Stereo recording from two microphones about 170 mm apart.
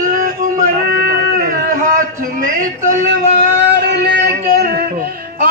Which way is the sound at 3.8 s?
70° right (ahead or behind).